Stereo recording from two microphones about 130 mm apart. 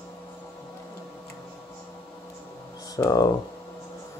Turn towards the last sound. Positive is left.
turn(degrees=30)  # may be behind; listen again after turning